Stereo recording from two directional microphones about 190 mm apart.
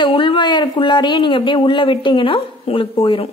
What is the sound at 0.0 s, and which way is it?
Speech, 25° left (ahead or behind).